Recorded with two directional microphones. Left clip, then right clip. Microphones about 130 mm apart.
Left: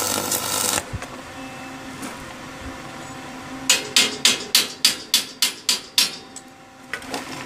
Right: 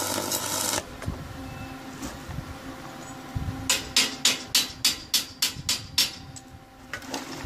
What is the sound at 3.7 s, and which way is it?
Music, 35° left (ahead or behind).